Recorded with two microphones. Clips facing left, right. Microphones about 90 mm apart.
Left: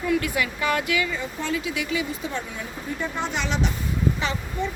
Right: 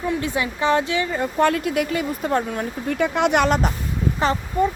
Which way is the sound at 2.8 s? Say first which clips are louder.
Right 9 dB; 75° right (ahead or behind).